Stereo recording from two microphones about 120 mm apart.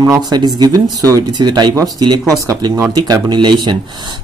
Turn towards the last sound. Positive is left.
turn(degrees=-40)  # may be behind; listen again after turning